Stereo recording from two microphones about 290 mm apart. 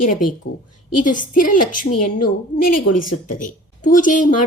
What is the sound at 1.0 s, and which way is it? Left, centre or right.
A woman's voice, left.